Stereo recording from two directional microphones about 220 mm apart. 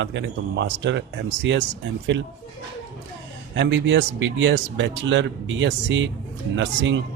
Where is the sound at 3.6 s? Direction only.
55° right (ahead or behind).